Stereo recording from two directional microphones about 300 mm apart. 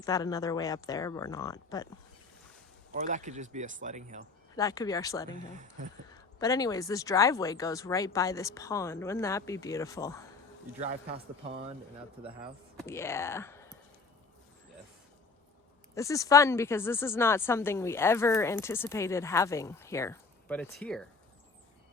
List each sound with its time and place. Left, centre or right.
0.0 s a woman's voice: centre
2.9 s speech: right
4.5 s a woman's voice: centre
10.8 s speech: right
12.7 s speech: centre
16.0 s a woman's voice: centre